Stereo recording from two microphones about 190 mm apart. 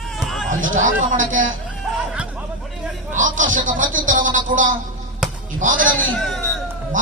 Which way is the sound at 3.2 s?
45° right (ahead or behind).